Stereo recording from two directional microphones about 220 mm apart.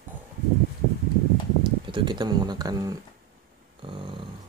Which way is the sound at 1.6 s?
20° right (ahead or behind).